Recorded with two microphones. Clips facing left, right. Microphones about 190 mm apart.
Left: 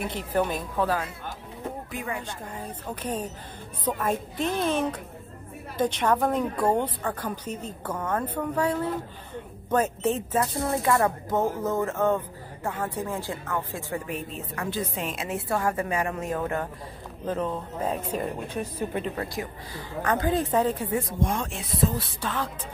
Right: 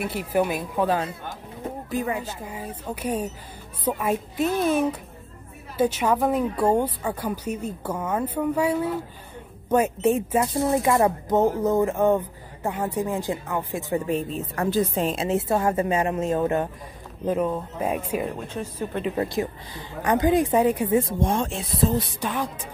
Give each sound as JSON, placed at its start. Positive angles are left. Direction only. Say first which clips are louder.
{"t": 0.0, "sound": "a woman's voice", "louder": "right 3 dB", "side_deg": -10}
{"t": 1.9, "sound": "speech", "louder": "right 11 dB", "side_deg": -35}
{"t": 2.2, "sound": "a woman's voice", "louder": "right 2 dB", "side_deg": -5}
{"t": 17.3, "sound": "a woman's voice", "louder": "right 5 dB", "side_deg": -10}
{"t": 18.5, "sound": "speech", "louder": "even", "side_deg": 10}
{"t": 19.1, "sound": "a woman's voice", "louder": "right 7 dB", "side_deg": -25}
{"t": 21.9, "sound": "a woman's voice", "louder": "right 4 dB", "side_deg": -15}